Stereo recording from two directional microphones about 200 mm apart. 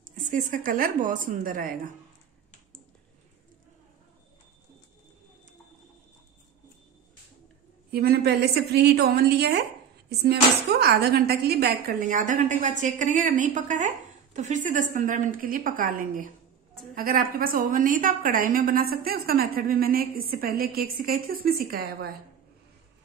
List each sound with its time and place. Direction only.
0.0 s speech: 40° right (ahead or behind)
7.9 s a woman's voice: 50° right (ahead or behind)